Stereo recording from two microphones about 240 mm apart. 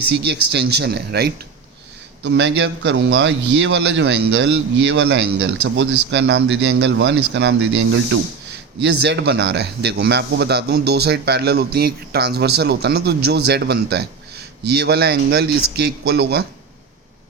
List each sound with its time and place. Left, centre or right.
0.1 s a man's voice: right